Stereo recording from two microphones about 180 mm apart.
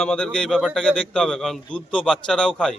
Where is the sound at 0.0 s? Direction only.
5° left (ahead or behind).